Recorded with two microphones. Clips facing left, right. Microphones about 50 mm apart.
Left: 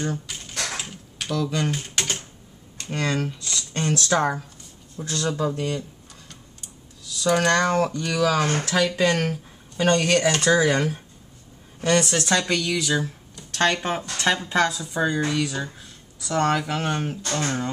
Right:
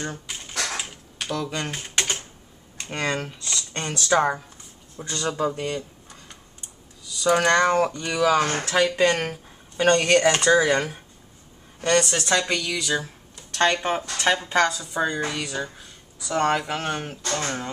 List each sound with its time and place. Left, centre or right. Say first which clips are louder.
0.0 s typing: left 3 dB; centre
1.5 s speech: left 3 dB; centre
3.8 s speech: right 1 dB; centre
7.1 s speech: right 1 dB; centre